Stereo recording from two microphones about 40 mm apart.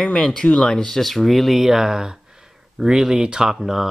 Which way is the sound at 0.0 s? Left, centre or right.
Centre.